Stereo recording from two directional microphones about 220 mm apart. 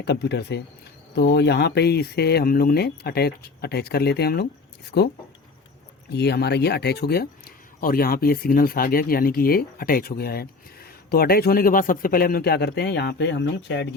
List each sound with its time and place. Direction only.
0.0 s speech: 50° left (ahead or behind)